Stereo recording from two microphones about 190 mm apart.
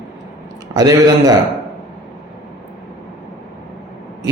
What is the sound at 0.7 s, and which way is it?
Speech, 20° right (ahead or behind).